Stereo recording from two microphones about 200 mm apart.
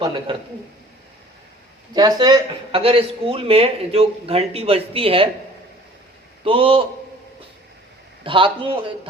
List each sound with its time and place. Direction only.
0.0 s a man's voice: 25° right (ahead or behind)
1.9 s a man's voice: 20° right (ahead or behind)
6.4 s a man's voice: 25° right (ahead or behind)
8.2 s a man's voice: 25° right (ahead or behind)